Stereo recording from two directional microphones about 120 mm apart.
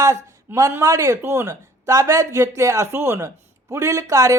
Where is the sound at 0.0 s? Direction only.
25° right (ahead or behind).